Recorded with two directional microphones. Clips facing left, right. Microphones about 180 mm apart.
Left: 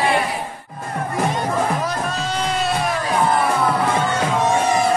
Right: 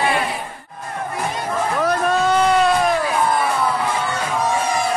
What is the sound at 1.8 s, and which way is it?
Music, 55° right (ahead or behind).